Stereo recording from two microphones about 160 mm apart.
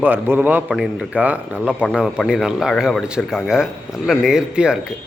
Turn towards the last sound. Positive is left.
turn(degrees=-5)  # may be behind; listen again after turning